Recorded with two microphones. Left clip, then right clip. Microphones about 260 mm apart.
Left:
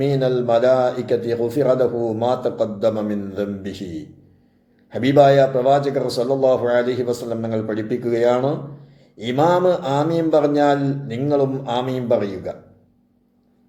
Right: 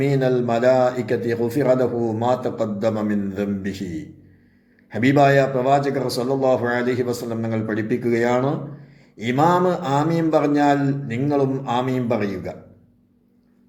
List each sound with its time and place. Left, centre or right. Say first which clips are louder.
0.0 s a man's voice: left 1 dB; right